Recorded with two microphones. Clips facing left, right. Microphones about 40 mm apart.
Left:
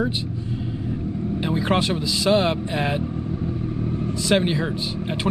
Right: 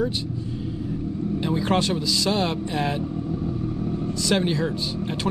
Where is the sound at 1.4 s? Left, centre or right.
Centre.